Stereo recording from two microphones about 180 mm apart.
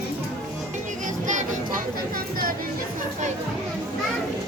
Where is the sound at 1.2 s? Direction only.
45° right (ahead or behind).